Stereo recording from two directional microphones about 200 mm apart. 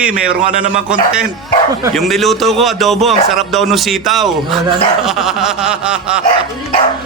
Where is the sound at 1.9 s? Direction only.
Centre (ahead or behind).